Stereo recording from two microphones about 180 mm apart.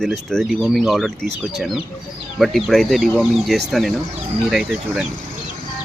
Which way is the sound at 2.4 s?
Centre (ahead or behind).